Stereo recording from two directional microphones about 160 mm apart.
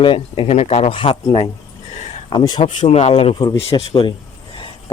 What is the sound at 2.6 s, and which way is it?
Speech, 40° left (ahead or behind).